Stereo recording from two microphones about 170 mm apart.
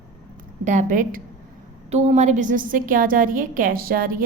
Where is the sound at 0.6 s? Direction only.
45° right (ahead or behind).